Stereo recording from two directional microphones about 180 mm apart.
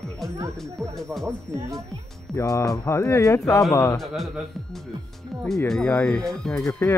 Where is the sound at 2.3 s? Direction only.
20° left (ahead or behind).